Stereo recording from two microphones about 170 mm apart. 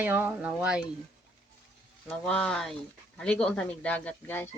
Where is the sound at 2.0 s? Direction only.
5° left (ahead or behind).